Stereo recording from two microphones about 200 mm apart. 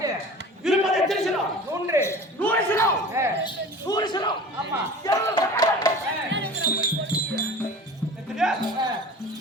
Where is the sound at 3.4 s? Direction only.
20° left (ahead or behind).